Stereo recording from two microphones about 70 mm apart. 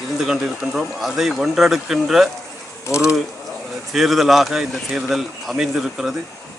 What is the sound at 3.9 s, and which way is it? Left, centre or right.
A man's voice, centre.